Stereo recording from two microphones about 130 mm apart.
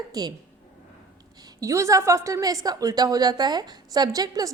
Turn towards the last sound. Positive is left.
turn(degrees=-30)  # may be behind; listen again after turning